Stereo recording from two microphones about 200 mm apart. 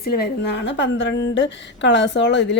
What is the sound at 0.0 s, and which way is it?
A woman's voice, 50° left (ahead or behind).